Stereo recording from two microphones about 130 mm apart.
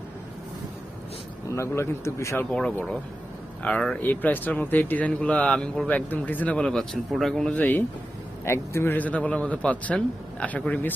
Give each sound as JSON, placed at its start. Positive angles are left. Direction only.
{"t": 1.5, "sound": "speech", "side_deg": 20}
{"t": 2.6, "sound": "speech", "side_deg": 5}